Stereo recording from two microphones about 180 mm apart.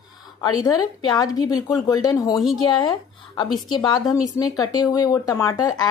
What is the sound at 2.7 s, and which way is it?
A woman's voice, 20° left (ahead or behind).